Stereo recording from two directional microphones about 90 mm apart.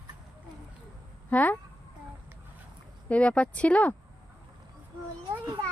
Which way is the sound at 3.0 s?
15° left (ahead or behind).